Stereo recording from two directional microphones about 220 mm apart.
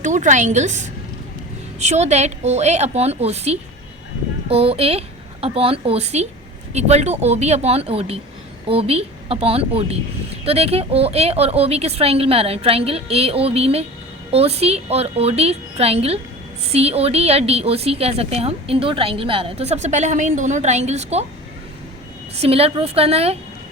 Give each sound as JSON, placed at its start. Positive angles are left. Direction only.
{"t": 0.0, "sound": "a woman's voice", "side_deg": -35}
{"t": 22.4, "sound": "a woman's voice", "side_deg": -25}